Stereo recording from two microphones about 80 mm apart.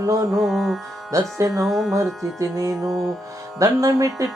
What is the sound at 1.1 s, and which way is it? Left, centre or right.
Music, right.